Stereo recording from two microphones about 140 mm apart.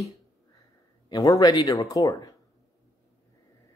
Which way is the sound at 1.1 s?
30° left (ahead or behind).